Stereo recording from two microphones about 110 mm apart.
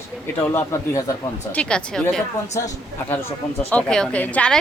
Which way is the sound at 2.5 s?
30° left (ahead or behind).